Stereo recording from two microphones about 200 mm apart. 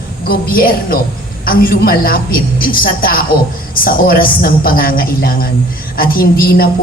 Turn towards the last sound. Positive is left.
turn(degrees=50)  # may be behind; listen again after turning